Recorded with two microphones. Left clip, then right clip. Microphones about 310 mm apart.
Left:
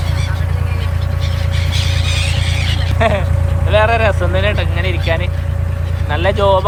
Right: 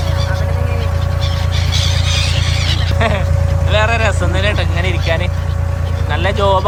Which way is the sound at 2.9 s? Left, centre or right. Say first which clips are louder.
Left 3 dB; centre.